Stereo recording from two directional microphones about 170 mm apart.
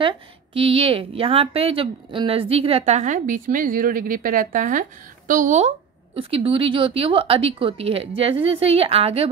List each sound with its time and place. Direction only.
0.6 s speech: 35° right (ahead or behind)
6.1 s speech: 30° right (ahead or behind)